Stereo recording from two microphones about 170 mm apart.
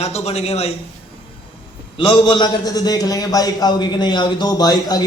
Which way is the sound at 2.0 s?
30° left (ahead or behind).